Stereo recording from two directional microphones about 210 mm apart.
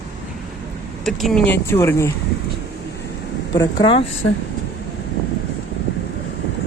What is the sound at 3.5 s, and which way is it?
Speech, 20° left (ahead or behind).